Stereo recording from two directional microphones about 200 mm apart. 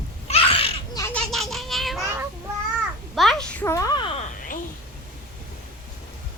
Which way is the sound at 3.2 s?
Centre (ahead or behind).